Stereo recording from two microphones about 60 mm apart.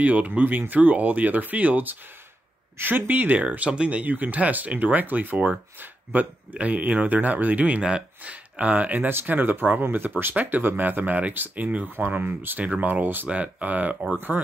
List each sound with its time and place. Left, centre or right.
0.0 s speech: right